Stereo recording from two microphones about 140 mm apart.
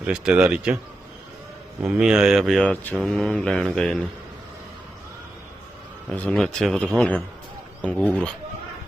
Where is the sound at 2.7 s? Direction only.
10° left (ahead or behind).